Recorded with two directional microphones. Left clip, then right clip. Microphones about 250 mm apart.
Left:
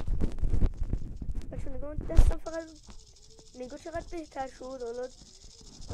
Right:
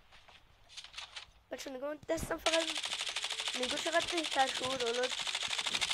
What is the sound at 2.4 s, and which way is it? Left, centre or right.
Speech, right.